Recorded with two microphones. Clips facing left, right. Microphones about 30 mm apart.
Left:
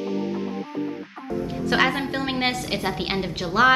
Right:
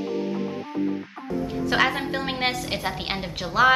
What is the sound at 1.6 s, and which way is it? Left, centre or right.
A woman's voice, centre.